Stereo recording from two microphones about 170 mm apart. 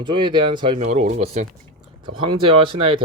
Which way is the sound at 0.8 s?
40° right (ahead or behind).